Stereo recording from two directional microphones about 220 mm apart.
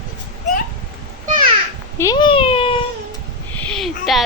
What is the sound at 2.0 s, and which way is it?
Cat, 20° left (ahead or behind).